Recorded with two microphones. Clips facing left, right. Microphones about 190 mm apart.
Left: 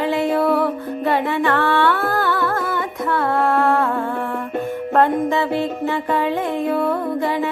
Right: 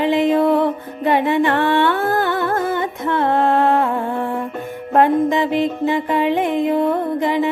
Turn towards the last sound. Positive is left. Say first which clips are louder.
# right 2 dB
turn(degrees=-20)  # may be behind; listen again after turning